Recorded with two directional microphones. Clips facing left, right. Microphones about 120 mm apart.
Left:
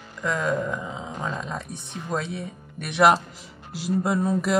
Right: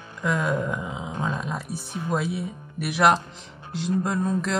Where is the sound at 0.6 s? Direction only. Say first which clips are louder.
Even; 5° right (ahead or behind).